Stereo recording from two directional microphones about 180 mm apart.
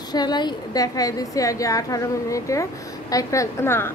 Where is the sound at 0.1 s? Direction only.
25° left (ahead or behind).